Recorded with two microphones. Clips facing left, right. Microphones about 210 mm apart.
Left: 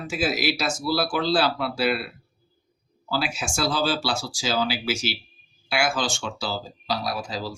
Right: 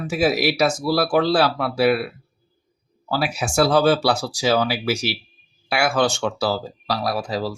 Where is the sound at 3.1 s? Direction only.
60° right (ahead or behind).